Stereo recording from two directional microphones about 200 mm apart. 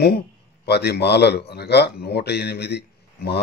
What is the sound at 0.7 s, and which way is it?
Speech, 55° left (ahead or behind).